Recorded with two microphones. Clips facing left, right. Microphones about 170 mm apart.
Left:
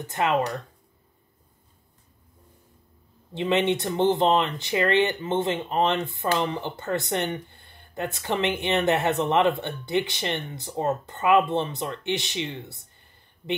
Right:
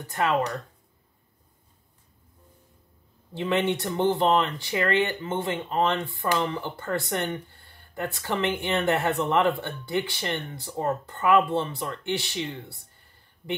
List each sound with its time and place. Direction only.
0.0 s speech: 20° left (ahead or behind)
3.3 s speech: 20° left (ahead or behind)